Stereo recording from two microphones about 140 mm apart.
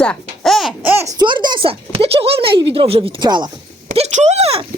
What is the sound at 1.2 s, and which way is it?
Speech, 35° right (ahead or behind).